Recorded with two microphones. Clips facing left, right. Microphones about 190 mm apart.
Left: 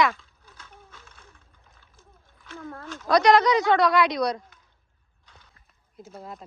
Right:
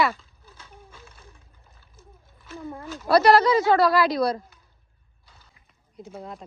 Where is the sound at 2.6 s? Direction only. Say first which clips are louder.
Right 3 dB; 15° right (ahead or behind).